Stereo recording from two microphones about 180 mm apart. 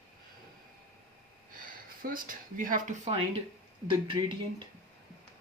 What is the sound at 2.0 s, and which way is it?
Speech, 50° right (ahead or behind).